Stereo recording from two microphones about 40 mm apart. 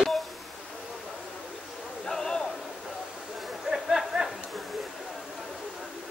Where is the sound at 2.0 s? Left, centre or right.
Centre.